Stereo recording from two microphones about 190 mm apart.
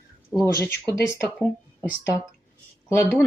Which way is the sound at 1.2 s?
5° right (ahead or behind).